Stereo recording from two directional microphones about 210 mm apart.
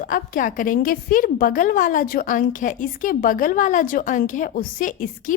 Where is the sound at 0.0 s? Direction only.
40° left (ahead or behind).